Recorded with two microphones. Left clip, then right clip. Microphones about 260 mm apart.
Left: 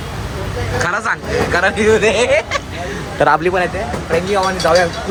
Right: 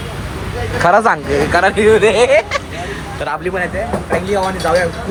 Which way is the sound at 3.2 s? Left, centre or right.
Left.